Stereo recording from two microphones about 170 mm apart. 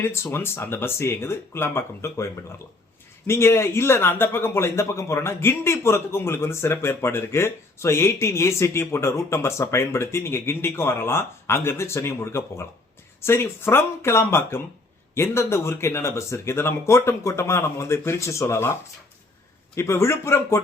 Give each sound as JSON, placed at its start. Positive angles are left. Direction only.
{"t": 0.0, "sound": "a man's voice", "side_deg": 15}